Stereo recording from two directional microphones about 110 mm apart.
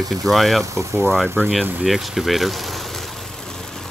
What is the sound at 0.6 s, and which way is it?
Speech, 25° right (ahead or behind).